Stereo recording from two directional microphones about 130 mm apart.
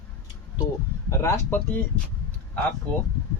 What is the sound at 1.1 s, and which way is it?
Speech, 20° left (ahead or behind).